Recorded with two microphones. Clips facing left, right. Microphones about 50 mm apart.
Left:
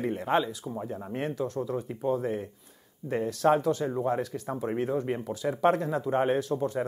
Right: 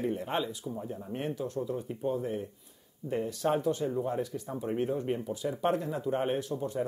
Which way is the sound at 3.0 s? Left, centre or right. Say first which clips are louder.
Left 5 dB; left.